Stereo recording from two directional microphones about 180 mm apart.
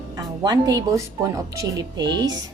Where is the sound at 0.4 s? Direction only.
20° right (ahead or behind).